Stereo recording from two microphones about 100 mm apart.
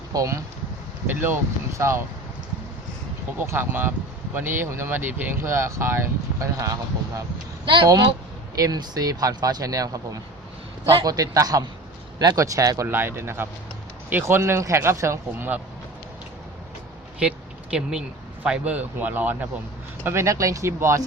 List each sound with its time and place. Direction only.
0.1 s speech: 35° right (ahead or behind)
1.0 s speech: 20° right (ahead or behind)
3.3 s speech: 25° right (ahead or behind)
7.6 s a woman's voice: 55° right (ahead or behind)
8.5 s speech: 40° right (ahead or behind)
12.9 s speech: 25° right (ahead or behind)
15.3 s speech: 20° right (ahead or behind)
17.2 s vehicle: 10° right (ahead or behind)
18.4 s speech: 10° right (ahead or behind)
20.1 s speech: 30° right (ahead or behind)